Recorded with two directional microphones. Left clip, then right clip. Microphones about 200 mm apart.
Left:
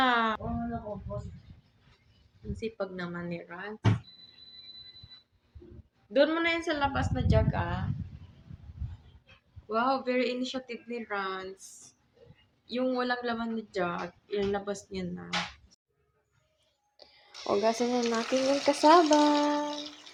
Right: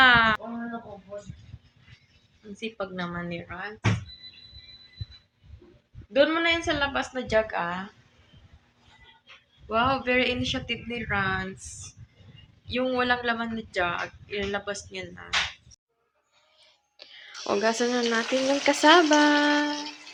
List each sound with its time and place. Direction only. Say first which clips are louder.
0.0 s a sound: right 8 dB; 10° left (ahead or behind)
2.6 s a woman's voice: right 3 dB; 15° right (ahead or behind)
6.1 s a woman's voice: right 4 dB; 10° right (ahead or behind)
9.6 s a man's voice: right 4 dB; centre (ahead or behind)
12.6 s a man's voice: right 5 dB; centre (ahead or behind)
17.0 s music: right 10 dB; 10° left (ahead or behind)
17.4 s a man's voice: right 3 dB; 5° right (ahead or behind)
19.1 s a woman's voice: right 4 dB; 10° right (ahead or behind)